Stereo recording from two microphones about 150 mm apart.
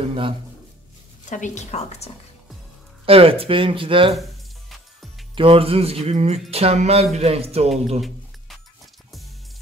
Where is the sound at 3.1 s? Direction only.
40° right (ahead or behind).